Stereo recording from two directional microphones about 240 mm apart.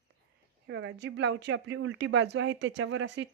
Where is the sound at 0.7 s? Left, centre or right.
Right.